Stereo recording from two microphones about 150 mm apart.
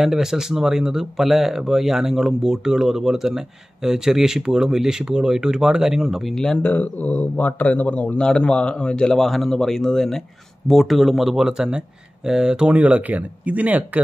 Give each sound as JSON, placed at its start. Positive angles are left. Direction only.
{"t": 0.0, "sound": "speech", "side_deg": -5}